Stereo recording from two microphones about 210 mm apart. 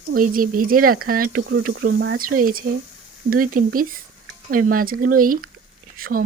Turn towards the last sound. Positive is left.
turn(degrees=-45)  # may be behind; listen again after turning